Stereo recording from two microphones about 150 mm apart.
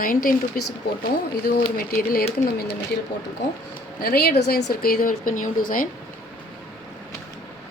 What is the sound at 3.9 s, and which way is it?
Speech, 90° left.